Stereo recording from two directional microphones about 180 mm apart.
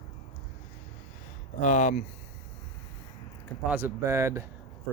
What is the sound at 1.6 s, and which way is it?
Speech, 40° left (ahead or behind).